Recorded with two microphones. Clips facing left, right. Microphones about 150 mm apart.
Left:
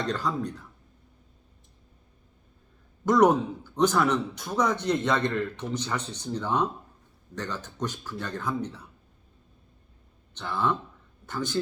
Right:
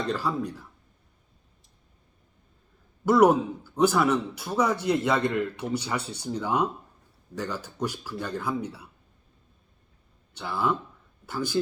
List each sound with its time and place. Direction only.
0.0 s a man's voice: 10° right (ahead or behind)
3.1 s a man's voice: 10° right (ahead or behind)
10.3 s a man's voice: 10° right (ahead or behind)